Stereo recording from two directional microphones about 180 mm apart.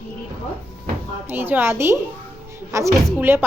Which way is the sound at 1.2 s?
10° right (ahead or behind).